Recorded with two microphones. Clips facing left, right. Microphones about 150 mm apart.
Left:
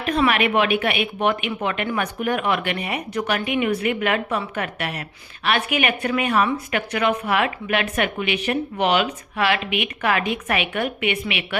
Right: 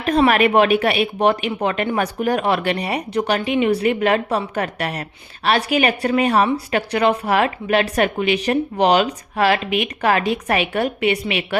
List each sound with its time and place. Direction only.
0.0 s speech: 40° right (ahead or behind)